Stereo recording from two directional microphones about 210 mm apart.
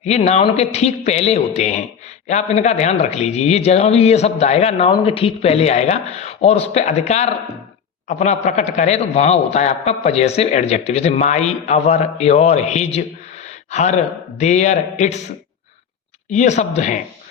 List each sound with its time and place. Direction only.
0.0 s a man's voice: 30° left (ahead or behind)
16.3 s a man's voice: 35° left (ahead or behind)